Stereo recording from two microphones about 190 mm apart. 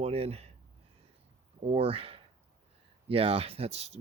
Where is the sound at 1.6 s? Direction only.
30° right (ahead or behind).